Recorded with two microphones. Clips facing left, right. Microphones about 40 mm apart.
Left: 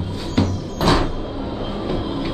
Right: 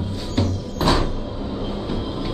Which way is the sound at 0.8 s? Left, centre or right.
Left.